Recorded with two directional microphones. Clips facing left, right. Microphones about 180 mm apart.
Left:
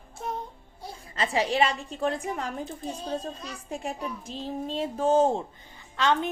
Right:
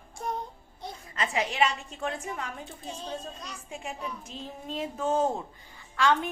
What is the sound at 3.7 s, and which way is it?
A woman's voice, 40° left (ahead or behind).